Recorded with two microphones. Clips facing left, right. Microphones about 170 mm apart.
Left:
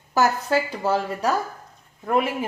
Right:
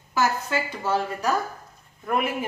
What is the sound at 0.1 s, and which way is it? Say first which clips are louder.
A woman's voice: left 4 dB; 40° left (ahead or behind).